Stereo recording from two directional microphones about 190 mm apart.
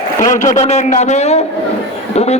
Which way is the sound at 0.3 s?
40° left (ahead or behind).